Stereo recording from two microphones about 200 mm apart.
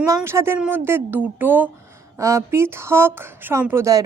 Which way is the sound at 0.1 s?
15° right (ahead or behind).